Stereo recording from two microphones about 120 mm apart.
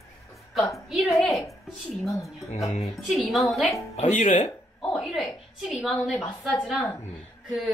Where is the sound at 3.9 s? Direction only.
75° left (ahead or behind).